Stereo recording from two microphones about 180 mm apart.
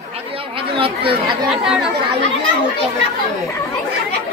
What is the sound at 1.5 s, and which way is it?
Speech, centre (ahead or behind).